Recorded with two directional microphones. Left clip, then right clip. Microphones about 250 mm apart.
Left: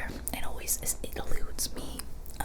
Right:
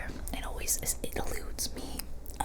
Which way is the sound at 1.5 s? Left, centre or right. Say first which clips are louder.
Left 1 dB; centre.